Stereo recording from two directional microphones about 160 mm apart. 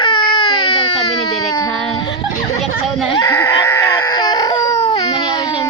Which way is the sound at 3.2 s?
15° left (ahead or behind).